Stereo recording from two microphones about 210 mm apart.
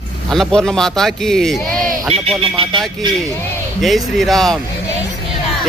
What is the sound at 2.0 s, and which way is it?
Speech, 25° right (ahead or behind).